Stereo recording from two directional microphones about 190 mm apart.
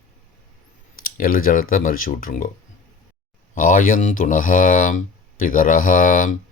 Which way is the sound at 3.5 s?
45° left (ahead or behind).